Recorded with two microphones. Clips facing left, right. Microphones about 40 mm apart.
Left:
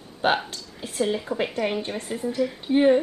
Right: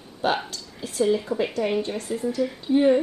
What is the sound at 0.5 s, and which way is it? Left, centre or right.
Speech, left.